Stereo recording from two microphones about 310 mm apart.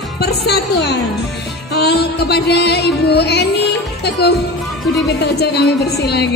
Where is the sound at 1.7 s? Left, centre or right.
Left.